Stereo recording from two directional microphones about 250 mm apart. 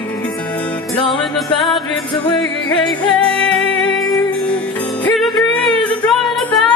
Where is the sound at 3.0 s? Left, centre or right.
Centre.